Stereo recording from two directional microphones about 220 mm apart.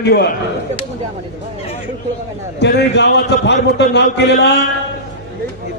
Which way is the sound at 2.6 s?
50° left (ahead or behind).